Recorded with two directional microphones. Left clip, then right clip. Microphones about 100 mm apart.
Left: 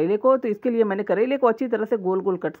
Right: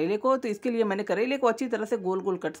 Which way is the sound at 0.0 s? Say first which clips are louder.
Left 6 dB; 40° left (ahead or behind).